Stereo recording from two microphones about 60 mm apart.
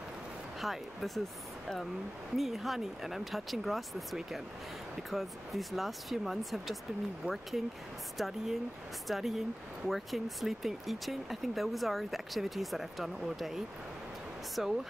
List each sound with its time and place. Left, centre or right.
0.6 s speech: centre
2.3 s speech: centre
8.2 s speech: centre
14.6 s speech: centre